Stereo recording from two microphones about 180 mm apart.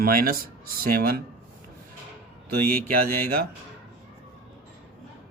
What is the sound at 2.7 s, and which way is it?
Speech, 55° right (ahead or behind).